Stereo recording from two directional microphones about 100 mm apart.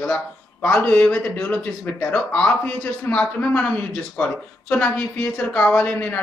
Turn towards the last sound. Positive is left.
turn(degrees=15)  # may be behind; listen again after turning